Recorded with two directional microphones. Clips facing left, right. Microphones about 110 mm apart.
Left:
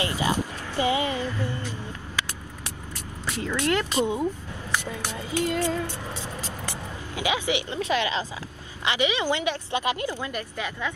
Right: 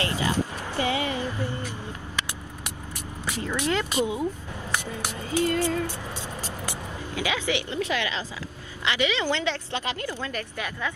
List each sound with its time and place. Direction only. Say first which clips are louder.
0.0 s music: left 1 dB; 20° left (ahead or behind)
0.7 s speech: left 2 dB; 20° left (ahead or behind)
1.1 s music: even; 15° right (ahead or behind)
3.3 s speech: left 2 dB; 15° right (ahead or behind)
5.1 s a woman's voice: right 2 dB; 15° left (ahead or behind)
7.2 s a woman's voice: left 1 dB; 15° left (ahead or behind)